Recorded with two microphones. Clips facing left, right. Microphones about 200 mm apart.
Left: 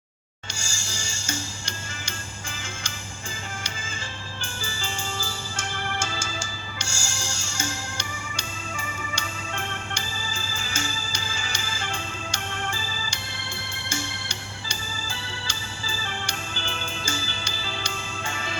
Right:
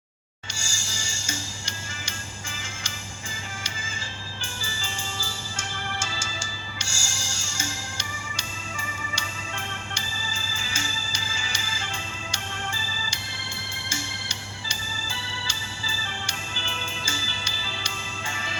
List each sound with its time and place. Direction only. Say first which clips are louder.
0.5 s music: left 1 dB; 55° left (ahead or behind)
4.4 s music: left 3 dB; 55° left (ahead or behind)
13.9 s organ: left 3 dB; 55° left (ahead or behind)